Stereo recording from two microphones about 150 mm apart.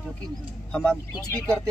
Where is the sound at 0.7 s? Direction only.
5° left (ahead or behind).